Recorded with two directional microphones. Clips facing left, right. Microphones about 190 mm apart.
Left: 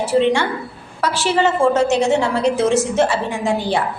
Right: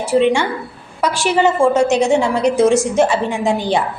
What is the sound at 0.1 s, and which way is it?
A woman's voice, 10° right (ahead or behind).